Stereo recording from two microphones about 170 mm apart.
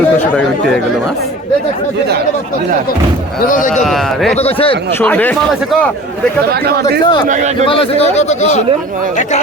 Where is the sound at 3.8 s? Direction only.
Centre (ahead or behind).